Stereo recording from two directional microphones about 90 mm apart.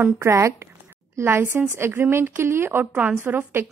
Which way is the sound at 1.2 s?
25° right (ahead or behind).